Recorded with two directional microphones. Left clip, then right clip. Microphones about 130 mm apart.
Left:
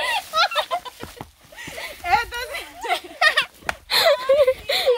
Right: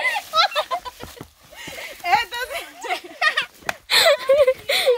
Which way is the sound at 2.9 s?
55° left (ahead or behind).